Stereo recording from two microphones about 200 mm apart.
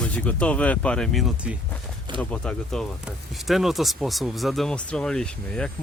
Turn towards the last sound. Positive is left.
turn(degrees=5)  # may be behind; listen again after turning